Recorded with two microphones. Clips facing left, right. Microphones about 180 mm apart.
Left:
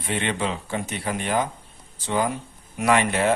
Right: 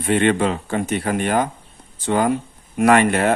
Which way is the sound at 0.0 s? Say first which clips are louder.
Right 9 dB; 55° right (ahead or behind).